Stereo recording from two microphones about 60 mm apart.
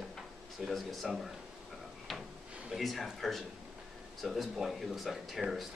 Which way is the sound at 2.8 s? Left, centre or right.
Centre.